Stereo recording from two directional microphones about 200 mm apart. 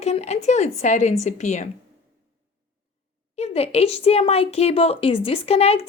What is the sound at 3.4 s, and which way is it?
A woman's voice, 30° left (ahead or behind).